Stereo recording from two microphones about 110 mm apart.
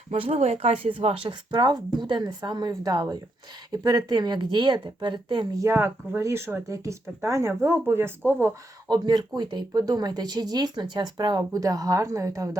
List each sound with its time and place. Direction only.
0.1 s speech: 70° right (ahead or behind)
0.9 s speech: 55° right (ahead or behind)
5.6 s speech: 25° right (ahead or behind)
8.9 s speech: 40° right (ahead or behind)